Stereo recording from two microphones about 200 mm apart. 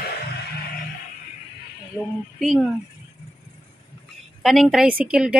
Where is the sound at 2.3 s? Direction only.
Centre (ahead or behind).